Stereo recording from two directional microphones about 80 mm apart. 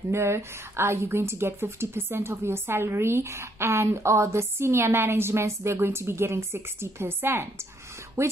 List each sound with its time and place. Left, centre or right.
0.1 s a woman's voice: right